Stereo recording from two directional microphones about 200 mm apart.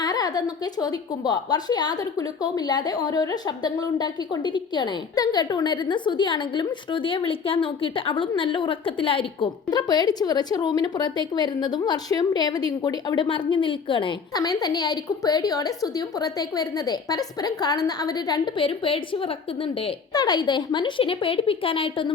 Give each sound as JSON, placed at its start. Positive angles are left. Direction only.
{"t": 0.0, "sound": "a woman's voice", "side_deg": 20}